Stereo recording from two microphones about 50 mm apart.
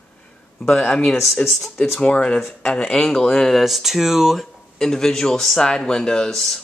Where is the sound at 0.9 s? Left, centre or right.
Centre.